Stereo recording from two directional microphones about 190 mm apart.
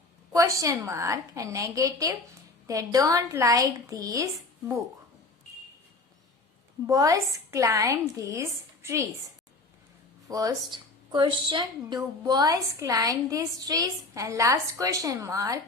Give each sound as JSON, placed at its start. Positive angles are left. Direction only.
{"t": 0.3, "sound": "a woman's voice", "side_deg": -15}
{"t": 6.8, "sound": "a woman's voice", "side_deg": -15}
{"t": 10.2, "sound": "a woman's voice", "side_deg": -20}